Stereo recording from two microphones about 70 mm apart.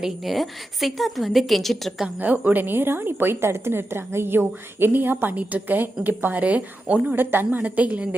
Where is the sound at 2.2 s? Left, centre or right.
Right.